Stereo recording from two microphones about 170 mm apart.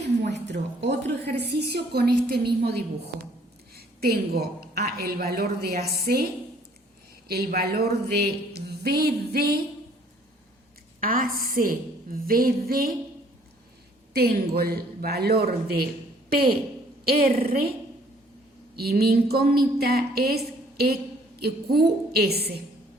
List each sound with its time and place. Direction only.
0.3 s a woman's voice: 90° right; by 2.8 s 70° right (ahead or behind)
3.8 s a sound: 65° right (ahead or behind)
4.9 s a woman's voice: 60° right (ahead or behind)
7.3 s a woman's voice: 65° right (ahead or behind)
11.0 s a woman's voice: 55° right (ahead or behind)
14.1 s a woman's voice: 65° right (ahead or behind)
18.8 s a woman's voice: 65° right (ahead or behind)